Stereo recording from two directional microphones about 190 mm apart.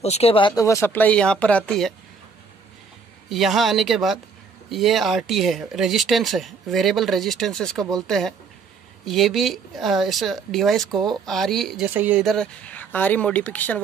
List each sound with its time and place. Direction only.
0.0 s speech: 35° left (ahead or behind); by 2.0 s 5° left (ahead or behind)
3.3 s speech: centre (ahead or behind)